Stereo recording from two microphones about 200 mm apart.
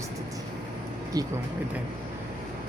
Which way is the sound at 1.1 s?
20° right (ahead or behind).